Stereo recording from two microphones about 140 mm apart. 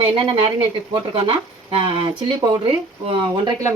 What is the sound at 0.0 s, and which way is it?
A woman's voice, 40° right (ahead or behind).